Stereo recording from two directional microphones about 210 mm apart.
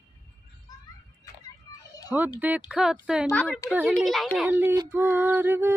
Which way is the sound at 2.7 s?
5° right (ahead or behind).